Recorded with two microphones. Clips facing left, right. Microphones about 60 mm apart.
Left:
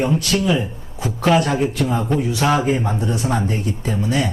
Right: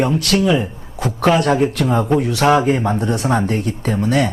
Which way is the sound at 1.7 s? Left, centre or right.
Right.